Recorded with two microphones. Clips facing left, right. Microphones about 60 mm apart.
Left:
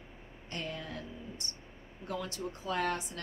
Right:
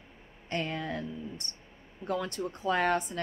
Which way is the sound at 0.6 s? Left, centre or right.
Right.